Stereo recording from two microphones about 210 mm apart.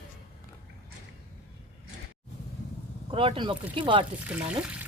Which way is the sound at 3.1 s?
25° right (ahead or behind).